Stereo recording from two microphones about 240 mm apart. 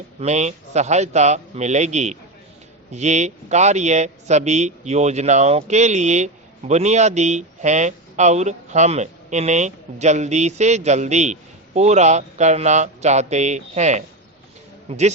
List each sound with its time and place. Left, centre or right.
0.2 s a man's voice: right